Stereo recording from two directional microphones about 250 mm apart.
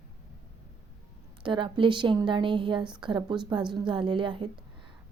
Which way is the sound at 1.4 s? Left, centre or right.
Centre.